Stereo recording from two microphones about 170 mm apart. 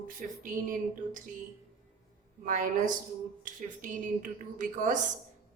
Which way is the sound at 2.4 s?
50° right (ahead or behind).